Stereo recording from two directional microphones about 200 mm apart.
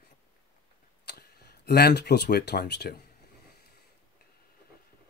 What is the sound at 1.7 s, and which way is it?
Speech, 55° left (ahead or behind).